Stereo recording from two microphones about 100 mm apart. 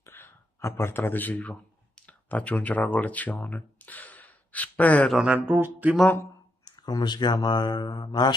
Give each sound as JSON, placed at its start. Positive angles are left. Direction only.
{"t": 0.0, "sound": "a sound", "side_deg": 25}
{"t": 2.0, "sound": "speech", "side_deg": 15}
{"t": 5.1, "sound": "speech", "side_deg": -10}
{"t": 6.6, "sound": "speech", "side_deg": 45}